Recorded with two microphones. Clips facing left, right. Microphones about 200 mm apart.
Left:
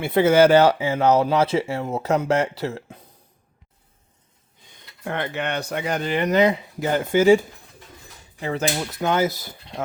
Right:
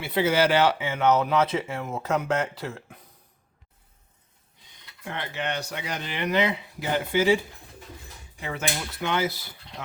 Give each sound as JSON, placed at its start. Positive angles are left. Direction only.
{"t": 0.0, "sound": "speech", "side_deg": 50}
{"t": 4.7, "sound": "speech", "side_deg": 50}